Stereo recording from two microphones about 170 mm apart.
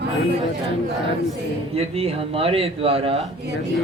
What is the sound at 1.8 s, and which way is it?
Speech, 35° right (ahead or behind).